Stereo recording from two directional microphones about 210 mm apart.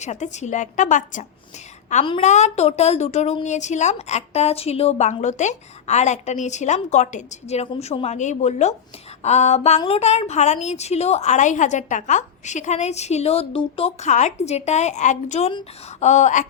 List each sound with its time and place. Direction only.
0.0 s a woman's voice: 35° left (ahead or behind)